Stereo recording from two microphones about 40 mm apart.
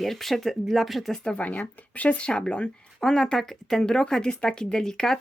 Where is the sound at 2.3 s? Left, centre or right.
Left.